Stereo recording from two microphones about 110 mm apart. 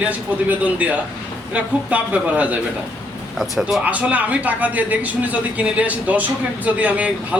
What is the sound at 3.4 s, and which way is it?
Speech, centre (ahead or behind).